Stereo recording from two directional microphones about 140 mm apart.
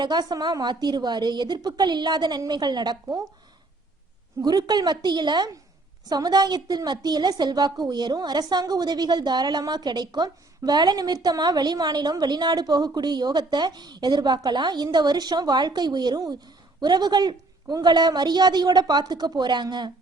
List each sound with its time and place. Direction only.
0.0 s a woman's voice: 30° right (ahead or behind)
4.4 s a woman's voice: 30° right (ahead or behind)